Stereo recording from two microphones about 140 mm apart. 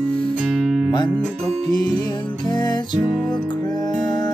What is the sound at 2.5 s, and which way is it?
Music, 30° left (ahead or behind).